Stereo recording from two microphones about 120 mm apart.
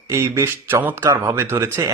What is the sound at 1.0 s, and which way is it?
Speech, 30° right (ahead or behind).